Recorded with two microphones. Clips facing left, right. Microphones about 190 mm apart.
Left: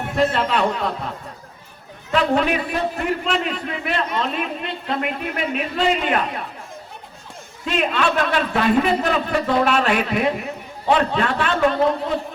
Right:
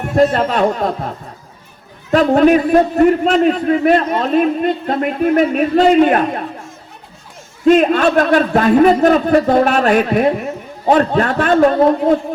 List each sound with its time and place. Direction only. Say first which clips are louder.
0.2 s a man's voice: right 6 dB; 40° right (ahead or behind)
7.6 s a man's voice: right 11 dB; 45° right (ahead or behind)